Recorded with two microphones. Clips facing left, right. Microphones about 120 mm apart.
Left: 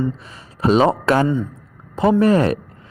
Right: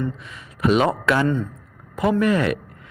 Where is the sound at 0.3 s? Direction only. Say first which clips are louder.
Left 1 dB; 30° left (ahead or behind).